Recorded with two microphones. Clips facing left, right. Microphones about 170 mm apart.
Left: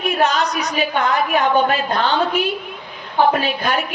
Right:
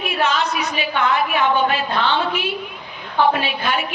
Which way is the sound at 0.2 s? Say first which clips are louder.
Even; 40° left (ahead or behind).